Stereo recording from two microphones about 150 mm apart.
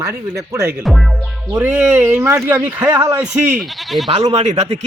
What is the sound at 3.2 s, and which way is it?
Speech, 15° right (ahead or behind).